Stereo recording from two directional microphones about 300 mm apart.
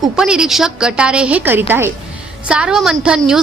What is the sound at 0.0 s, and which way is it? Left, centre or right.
A woman's voice, centre.